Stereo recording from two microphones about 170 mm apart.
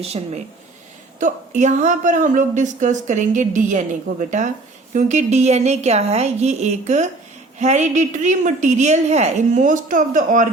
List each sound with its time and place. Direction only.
0.0 s a woman's voice: 35° right (ahead or behind)